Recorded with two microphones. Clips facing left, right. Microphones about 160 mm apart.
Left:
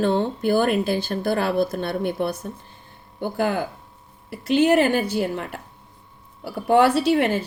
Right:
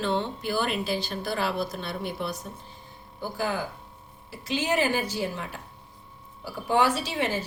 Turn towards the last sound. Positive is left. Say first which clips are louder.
# left 9 dB
turn(degrees=60)  # may be behind; listen again after turning